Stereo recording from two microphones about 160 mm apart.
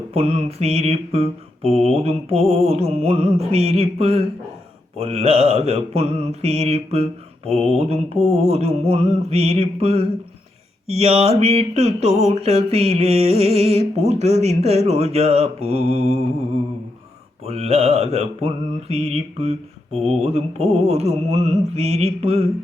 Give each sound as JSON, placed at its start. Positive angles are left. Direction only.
{"t": 0.1, "sound": "mantra", "side_deg": -40}
{"t": 17.4, "sound": "mantra", "side_deg": -40}